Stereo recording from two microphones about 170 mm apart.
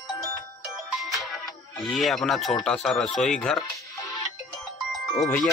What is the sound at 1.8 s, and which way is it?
Speech, centre (ahead or behind).